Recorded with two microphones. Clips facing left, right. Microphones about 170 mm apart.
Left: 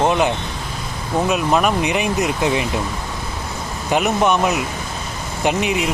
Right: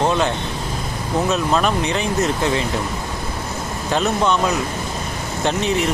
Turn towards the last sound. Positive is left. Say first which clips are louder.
# even
turn(degrees=10)  # may be behind; listen again after turning